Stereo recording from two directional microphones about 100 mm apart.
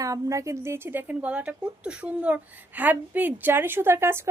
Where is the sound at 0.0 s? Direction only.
35° right (ahead or behind).